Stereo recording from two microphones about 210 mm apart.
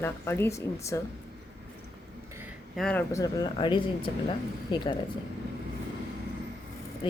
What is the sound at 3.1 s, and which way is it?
Speech, 15° left (ahead or behind).